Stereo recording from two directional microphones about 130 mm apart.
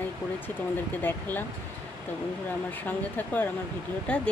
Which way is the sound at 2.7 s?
15° left (ahead or behind).